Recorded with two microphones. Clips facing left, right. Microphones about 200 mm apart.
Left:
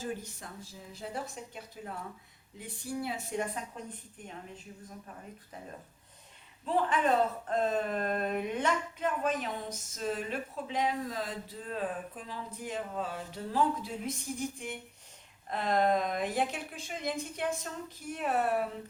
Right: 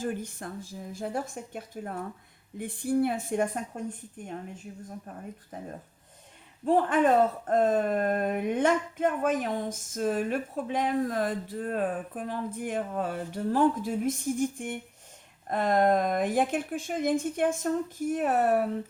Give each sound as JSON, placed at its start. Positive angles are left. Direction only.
{"t": 0.0, "sound": "speech", "side_deg": -55}
{"t": 6.7, "sound": "speech", "side_deg": -50}